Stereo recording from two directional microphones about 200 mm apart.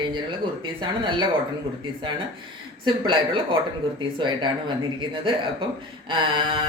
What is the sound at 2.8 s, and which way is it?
Speech, 25° right (ahead or behind).